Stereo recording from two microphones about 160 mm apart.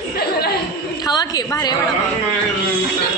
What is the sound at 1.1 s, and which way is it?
Speech, 25° left (ahead or behind).